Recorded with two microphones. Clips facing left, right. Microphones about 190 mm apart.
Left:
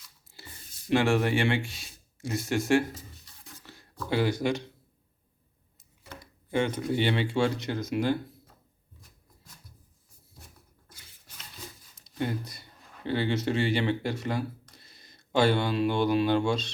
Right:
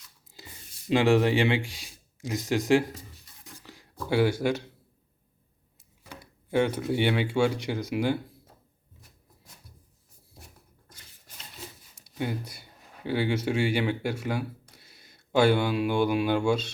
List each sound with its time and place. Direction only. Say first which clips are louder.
0.9 s speech: right 3 dB; 15° right (ahead or behind)
6.5 s speech: right 2 dB; 10° right (ahead or behind)
11.9 s speech: even; 10° right (ahead or behind)